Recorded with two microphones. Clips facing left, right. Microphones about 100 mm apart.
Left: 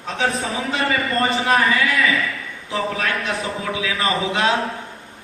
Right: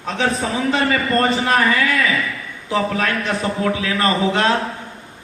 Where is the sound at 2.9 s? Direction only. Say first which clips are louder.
Right 3 dB; 35° right (ahead or behind).